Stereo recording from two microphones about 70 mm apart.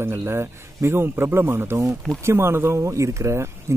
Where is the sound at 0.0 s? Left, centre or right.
Right.